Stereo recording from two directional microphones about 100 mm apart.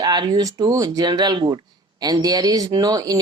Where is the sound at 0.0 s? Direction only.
45° right (ahead or behind).